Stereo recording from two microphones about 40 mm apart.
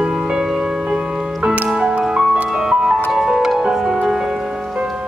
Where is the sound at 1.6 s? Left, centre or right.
Centre.